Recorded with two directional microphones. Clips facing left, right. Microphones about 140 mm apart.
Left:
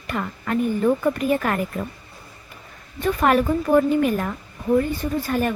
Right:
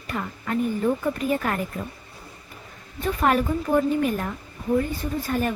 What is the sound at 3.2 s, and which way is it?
A woman's voice, 80° left.